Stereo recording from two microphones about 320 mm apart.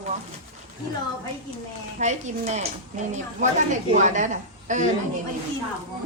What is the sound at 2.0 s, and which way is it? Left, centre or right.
Speech, right.